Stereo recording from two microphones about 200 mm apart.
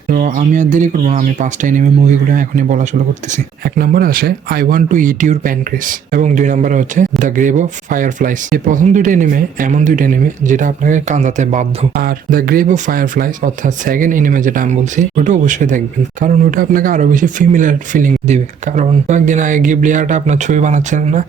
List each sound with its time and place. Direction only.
0.1 s speech: 45° right (ahead or behind)